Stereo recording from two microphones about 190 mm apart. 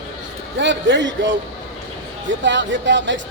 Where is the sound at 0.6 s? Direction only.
70° right (ahead or behind).